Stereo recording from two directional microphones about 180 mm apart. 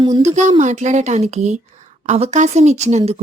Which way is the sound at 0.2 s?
40° right (ahead or behind).